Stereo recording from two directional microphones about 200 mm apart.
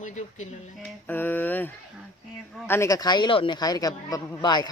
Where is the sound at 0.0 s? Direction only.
35° left (ahead or behind).